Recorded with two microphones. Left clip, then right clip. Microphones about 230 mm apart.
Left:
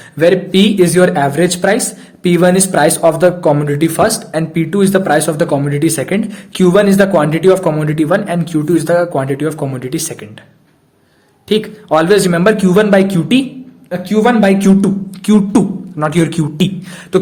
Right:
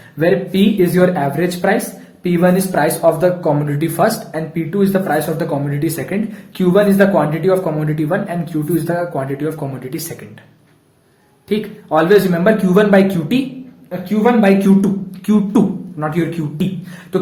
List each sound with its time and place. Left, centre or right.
0.2 s speech: left
11.4 s speech: left